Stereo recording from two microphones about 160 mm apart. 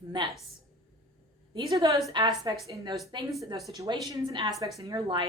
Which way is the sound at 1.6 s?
25° right (ahead or behind).